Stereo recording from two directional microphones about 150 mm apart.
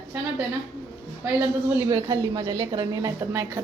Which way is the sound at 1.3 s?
15° right (ahead or behind).